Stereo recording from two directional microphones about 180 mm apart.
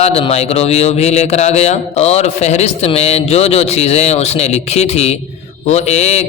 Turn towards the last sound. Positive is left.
turn(degrees=40)  # may be behind; listen again after turning